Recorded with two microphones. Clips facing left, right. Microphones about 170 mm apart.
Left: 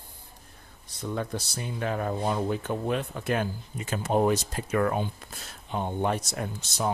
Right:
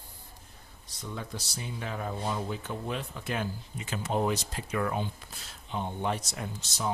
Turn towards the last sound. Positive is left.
turn(degrees=55)  # may be behind; listen again after turning